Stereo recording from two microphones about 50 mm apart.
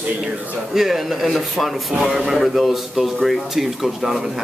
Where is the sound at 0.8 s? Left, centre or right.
Centre.